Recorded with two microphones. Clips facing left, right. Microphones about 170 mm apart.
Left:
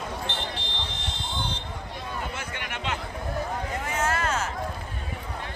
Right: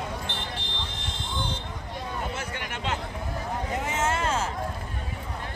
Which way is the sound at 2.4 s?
40° right (ahead or behind).